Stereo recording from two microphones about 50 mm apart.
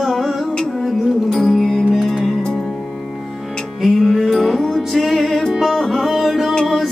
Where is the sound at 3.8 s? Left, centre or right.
Centre.